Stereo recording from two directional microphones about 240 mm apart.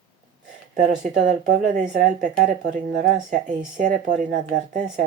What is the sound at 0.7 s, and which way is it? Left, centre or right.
Speech, right.